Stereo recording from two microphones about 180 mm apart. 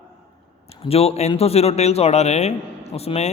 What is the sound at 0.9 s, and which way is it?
A man's voice, 35° left (ahead or behind).